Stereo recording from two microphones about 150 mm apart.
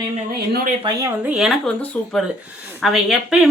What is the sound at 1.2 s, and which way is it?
A woman's voice, 5° right (ahead or behind).